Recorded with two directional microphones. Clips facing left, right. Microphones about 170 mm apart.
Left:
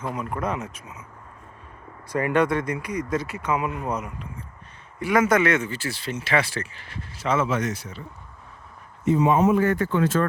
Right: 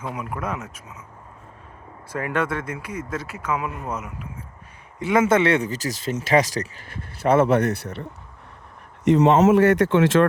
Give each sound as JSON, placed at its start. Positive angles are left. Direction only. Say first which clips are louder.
{"t": 0.1, "sound": "speech", "louder": "left 2 dB", "side_deg": -5}
{"t": 2.0, "sound": "speech", "louder": "left 4 dB", "side_deg": -5}
{"t": 4.9, "sound": "speech", "louder": "right 2 dB", "side_deg": -25}
{"t": 9.0, "sound": "speech", "louder": "right 4 dB", "side_deg": -80}